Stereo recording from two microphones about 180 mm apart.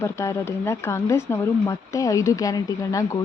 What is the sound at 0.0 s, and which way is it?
A woman's voice, 15° left (ahead or behind).